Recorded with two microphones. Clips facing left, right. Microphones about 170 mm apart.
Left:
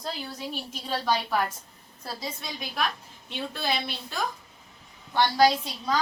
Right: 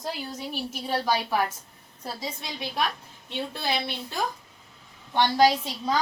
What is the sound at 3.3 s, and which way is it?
Speech, 25° right (ahead or behind).